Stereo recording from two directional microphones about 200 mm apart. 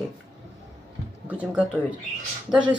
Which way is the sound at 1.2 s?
5° right (ahead or behind).